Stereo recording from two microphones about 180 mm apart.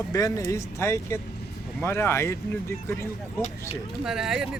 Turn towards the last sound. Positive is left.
turn(degrees=-5)  # may be behind; listen again after turning